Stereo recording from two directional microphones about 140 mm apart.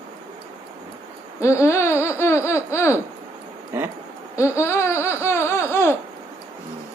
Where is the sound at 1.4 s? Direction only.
20° left (ahead or behind).